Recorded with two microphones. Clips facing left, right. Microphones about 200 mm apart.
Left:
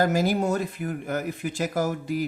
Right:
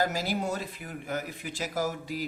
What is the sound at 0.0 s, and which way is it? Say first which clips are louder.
Speech: left 7 dB; 50° left (ahead or behind).